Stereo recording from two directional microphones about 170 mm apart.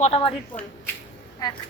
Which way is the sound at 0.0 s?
35° left (ahead or behind).